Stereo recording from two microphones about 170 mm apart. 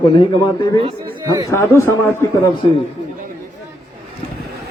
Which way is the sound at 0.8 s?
20° right (ahead or behind).